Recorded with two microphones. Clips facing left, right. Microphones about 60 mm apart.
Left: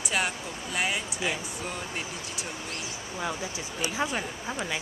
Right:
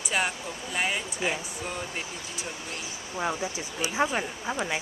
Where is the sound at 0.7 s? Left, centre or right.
Centre.